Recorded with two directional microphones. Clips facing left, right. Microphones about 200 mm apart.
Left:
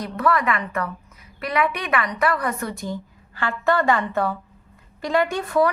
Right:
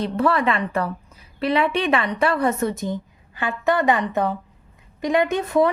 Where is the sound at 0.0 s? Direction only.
30° right (ahead or behind).